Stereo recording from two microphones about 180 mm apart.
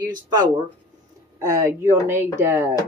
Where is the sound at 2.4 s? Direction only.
15° right (ahead or behind).